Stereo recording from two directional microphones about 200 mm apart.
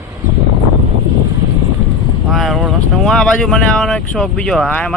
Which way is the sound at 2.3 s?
Centre (ahead or behind).